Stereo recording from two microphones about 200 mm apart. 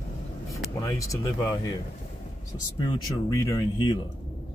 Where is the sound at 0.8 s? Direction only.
15° left (ahead or behind).